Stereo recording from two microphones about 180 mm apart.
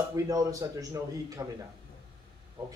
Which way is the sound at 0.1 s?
20° right (ahead or behind).